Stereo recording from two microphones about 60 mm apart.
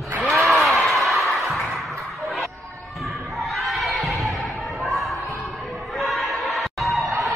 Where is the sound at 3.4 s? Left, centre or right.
Centre.